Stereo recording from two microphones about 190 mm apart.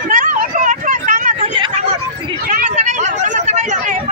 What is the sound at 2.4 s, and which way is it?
Hubbub, 45° right (ahead or behind).